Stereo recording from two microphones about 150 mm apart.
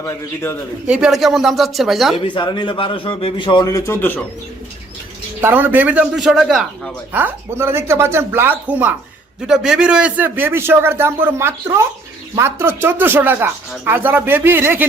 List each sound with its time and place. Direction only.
0.0 s a man's voice: 15° left (ahead or behind)
0.9 s speech: 5° right (ahead or behind)
2.1 s a man's voice: 35° left (ahead or behind); by 4.3 s 10° left (ahead or behind)
5.4 s speech: 15° right (ahead or behind)